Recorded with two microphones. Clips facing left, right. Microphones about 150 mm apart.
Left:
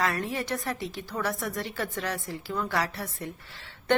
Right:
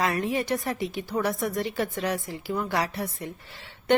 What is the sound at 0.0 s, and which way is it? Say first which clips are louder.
A woman's voice: right 3 dB; 15° right (ahead or behind).